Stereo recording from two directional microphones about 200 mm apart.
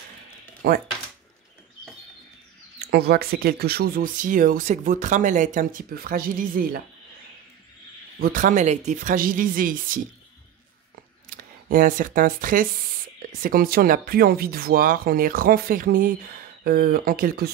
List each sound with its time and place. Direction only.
0.6 s speech: 50° right (ahead or behind)
2.8 s speech: 50° right (ahead or behind)
8.2 s speech: 45° right (ahead or behind)
11.2 s speech: 45° right (ahead or behind)